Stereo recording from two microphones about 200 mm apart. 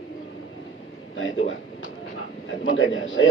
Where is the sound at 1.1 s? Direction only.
75° left (ahead or behind).